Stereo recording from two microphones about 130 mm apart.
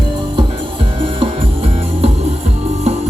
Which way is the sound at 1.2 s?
50° right (ahead or behind).